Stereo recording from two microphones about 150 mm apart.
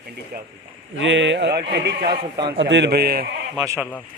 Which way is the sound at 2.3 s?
30° right (ahead or behind).